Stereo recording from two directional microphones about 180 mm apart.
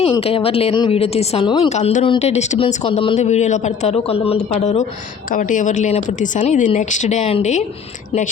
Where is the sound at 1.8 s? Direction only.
40° left (ahead or behind).